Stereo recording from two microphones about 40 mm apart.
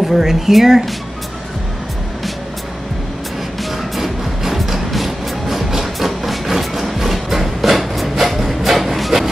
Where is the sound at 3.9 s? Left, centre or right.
Centre.